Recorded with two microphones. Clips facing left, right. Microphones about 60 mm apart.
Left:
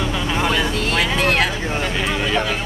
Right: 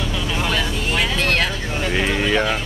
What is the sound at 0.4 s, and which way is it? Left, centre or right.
Vehicle, centre.